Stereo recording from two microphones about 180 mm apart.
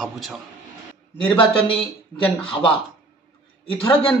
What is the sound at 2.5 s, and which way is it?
Speech, 30° left (ahead or behind).